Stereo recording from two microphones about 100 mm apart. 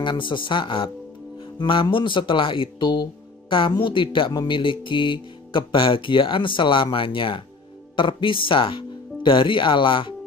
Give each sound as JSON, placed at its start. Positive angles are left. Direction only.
{"t": 0.0, "sound": "speech", "side_deg": 55}